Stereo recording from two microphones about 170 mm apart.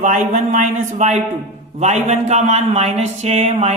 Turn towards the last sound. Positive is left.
turn(degrees=-40)  # may be behind; listen again after turning